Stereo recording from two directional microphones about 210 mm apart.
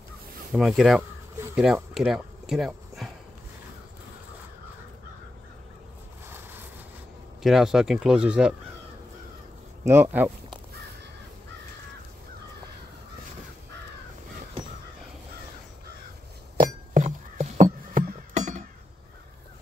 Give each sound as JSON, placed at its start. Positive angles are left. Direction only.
{"t": 0.5, "sound": "speech", "side_deg": 0}
{"t": 7.4, "sound": "speech", "side_deg": 0}
{"t": 9.8, "sound": "speech", "side_deg": -10}
{"t": 16.9, "sound": "a sound", "side_deg": -35}